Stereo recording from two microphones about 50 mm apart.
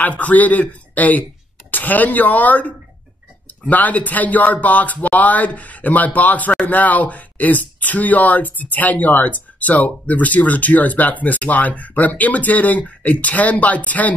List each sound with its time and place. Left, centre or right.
0.0 s speech: left